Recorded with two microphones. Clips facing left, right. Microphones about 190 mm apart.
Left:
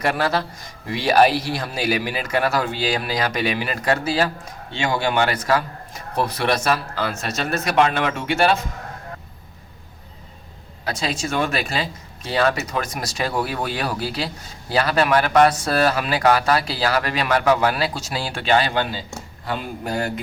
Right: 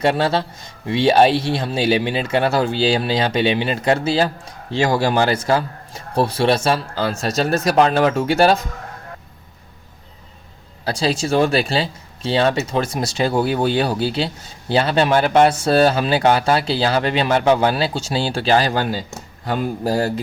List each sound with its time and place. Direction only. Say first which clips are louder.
0.0 s speech: right 4 dB; 25° right (ahead or behind)
10.8 s speech: right 5 dB; 30° right (ahead or behind)